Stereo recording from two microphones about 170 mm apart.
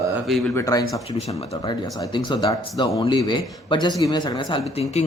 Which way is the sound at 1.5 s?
25° left (ahead or behind).